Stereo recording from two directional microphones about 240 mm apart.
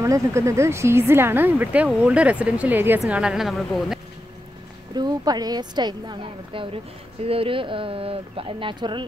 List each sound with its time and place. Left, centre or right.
0.0 s speech: centre
4.9 s a woman's voice: centre